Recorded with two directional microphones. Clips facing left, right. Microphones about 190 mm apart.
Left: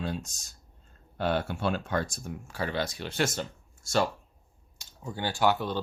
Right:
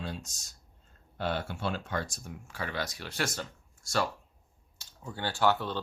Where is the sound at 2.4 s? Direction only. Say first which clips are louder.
Left 4 dB; 35° left (ahead or behind).